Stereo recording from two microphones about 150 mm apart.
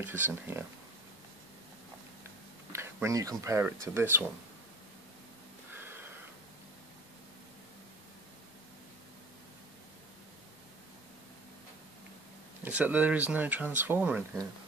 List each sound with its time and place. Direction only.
0.0 s speech: 15° right (ahead or behind)
2.7 s speech: 20° right (ahead or behind)
12.6 s speech: 10° right (ahead or behind)